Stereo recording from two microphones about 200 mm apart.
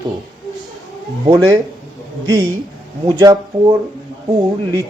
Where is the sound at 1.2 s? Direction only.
20° right (ahead or behind).